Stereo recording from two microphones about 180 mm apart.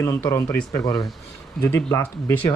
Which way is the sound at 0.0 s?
15° left (ahead or behind).